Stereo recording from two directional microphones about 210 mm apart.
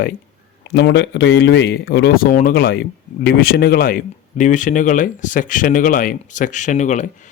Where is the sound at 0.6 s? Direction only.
55° left (ahead or behind).